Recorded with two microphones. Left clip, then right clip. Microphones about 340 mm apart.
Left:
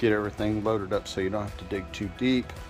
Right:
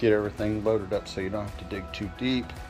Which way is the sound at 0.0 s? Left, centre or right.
Centre.